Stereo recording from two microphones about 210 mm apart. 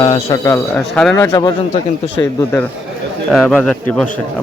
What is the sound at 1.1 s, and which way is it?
A man's voice, 15° left (ahead or behind).